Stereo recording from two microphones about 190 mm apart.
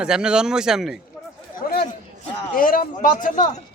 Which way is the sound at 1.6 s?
50° left (ahead or behind).